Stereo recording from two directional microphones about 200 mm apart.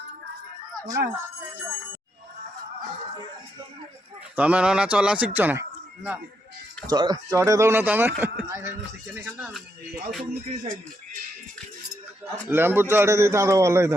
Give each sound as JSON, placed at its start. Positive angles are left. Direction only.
{"t": 0.8, "sound": "a man's voice", "side_deg": -15}
{"t": 4.4, "sound": "a man's voice", "side_deg": -5}
{"t": 6.8, "sound": "a man's voice", "side_deg": -20}
{"t": 10.6, "sound": "speech", "side_deg": -40}
{"t": 12.5, "sound": "a man's voice", "side_deg": -10}